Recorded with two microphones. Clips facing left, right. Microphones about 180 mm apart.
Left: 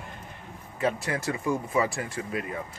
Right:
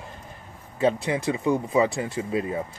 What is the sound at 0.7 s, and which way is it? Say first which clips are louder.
Speech: right 5 dB; 20° right (ahead or behind).